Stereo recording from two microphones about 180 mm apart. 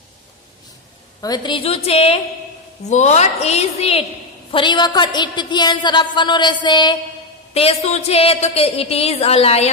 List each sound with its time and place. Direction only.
1.2 s a woman's voice: 25° left (ahead or behind)